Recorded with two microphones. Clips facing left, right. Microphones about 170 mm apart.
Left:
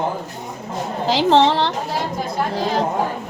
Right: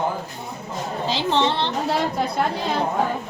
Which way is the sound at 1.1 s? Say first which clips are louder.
Left 7 dB; 90° left.